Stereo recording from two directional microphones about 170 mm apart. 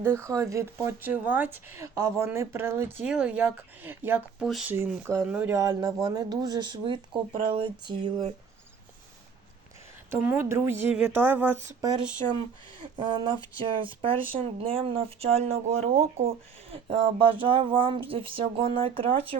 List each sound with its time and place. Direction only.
0.0 s speech: 15° right (ahead or behind); by 4.7 s centre (ahead or behind)
4.7 s speech: 15° right (ahead or behind); by 8.3 s 30° right (ahead or behind)
10.1 s speech: 10° right (ahead or behind)
11.8 s speech: 25° right (ahead or behind)